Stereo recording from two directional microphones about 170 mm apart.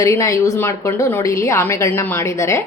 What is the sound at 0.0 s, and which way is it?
A woman's voice, 20° left (ahead or behind).